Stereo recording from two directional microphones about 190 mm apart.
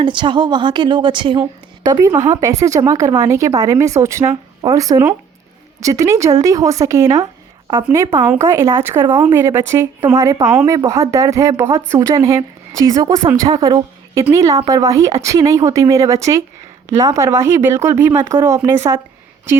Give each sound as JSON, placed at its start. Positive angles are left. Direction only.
{"t": 0.0, "sound": "a woman's voice", "side_deg": -25}